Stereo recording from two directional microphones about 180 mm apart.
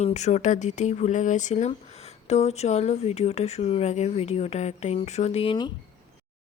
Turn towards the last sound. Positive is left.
turn(degrees=30)  # may be behind; listen again after turning